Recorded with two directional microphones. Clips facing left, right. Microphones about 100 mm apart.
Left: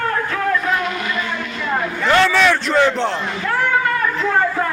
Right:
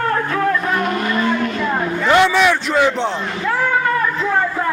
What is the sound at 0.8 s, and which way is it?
Vehicle, 40° right (ahead or behind).